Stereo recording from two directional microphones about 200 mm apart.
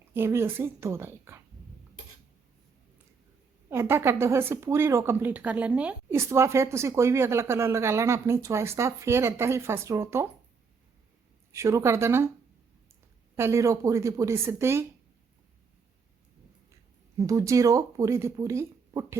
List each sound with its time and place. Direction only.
0.1 s speech: 10° right (ahead or behind)
3.7 s speech: 10° right (ahead or behind)
11.5 s speech: 15° right (ahead or behind)
13.3 s speech: 15° right (ahead or behind)
17.2 s speech: 15° right (ahead or behind)